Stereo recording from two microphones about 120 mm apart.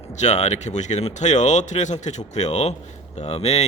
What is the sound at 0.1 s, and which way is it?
Speech, 75° left (ahead or behind).